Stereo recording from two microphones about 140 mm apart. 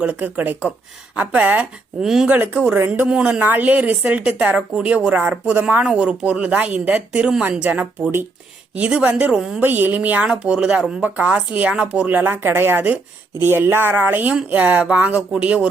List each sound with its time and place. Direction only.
0.0 s speech: 10° right (ahead or behind)